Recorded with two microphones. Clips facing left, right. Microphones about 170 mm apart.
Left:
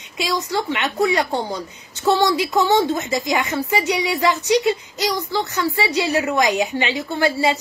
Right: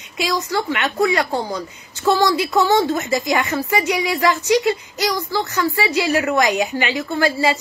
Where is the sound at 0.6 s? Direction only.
20° left (ahead or behind).